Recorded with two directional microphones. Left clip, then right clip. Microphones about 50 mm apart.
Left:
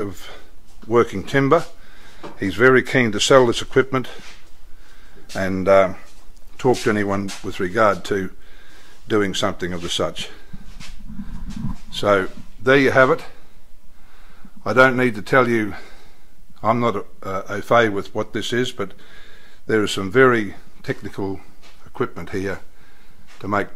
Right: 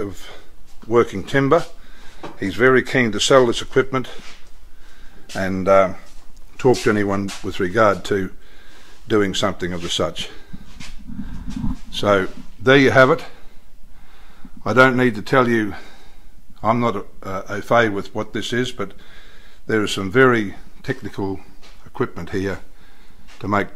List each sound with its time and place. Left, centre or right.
0.0 s speech: left
5.3 s speech: left
6.9 s a man's voice: centre
7.4 s speech: centre
11.9 s speech: centre
14.6 s a man's voice: centre